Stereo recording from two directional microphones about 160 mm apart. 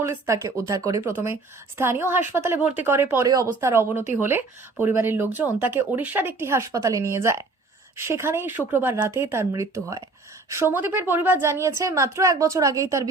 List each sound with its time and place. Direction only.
0.0 s a woman's voice: 15° right (ahead or behind)